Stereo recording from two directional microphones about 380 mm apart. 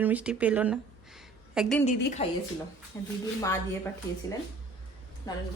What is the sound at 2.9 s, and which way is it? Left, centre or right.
Speech, centre.